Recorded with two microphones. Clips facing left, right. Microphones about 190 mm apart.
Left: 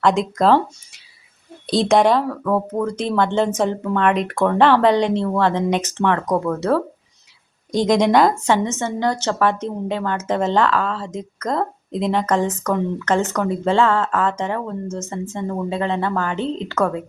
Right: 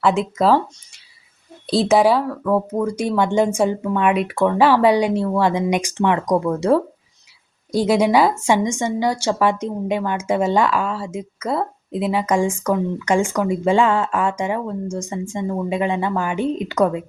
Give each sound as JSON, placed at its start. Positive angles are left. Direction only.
{"t": 0.0, "sound": "speech", "side_deg": -5}
{"t": 1.6, "sound": "a woman's voice", "side_deg": 0}